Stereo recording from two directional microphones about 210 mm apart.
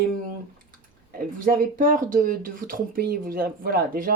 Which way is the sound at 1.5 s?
40° right (ahead or behind).